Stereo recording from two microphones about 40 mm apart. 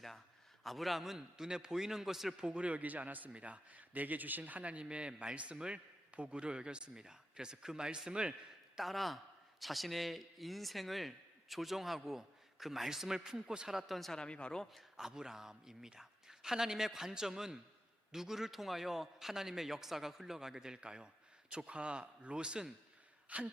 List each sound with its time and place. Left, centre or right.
0.6 s a man's voice: centre
1.4 s a man's voice: centre
2.6 s speech: right
8.8 s a man's voice: centre
14.1 s speech: left
14.6 s a man's voice: centre
14.9 s a man's voice: centre
23.3 s speech: right